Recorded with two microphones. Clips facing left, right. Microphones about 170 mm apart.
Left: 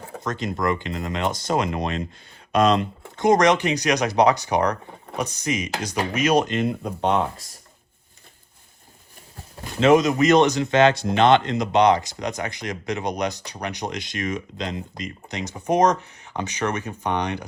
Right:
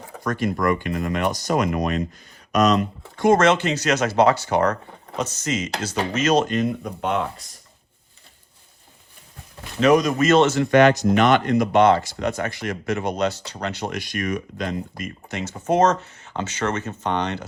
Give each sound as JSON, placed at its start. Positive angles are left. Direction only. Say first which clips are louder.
{"t": 0.2, "sound": "speech", "louder": "right 3 dB", "side_deg": 20}
{"t": 3.2, "sound": "speech", "louder": "right 1 dB", "side_deg": 15}
{"t": 6.5, "sound": "speech", "louder": "right 1 dB", "side_deg": 25}
{"t": 9.8, "sound": "speech", "louder": "left 1 dB", "side_deg": 25}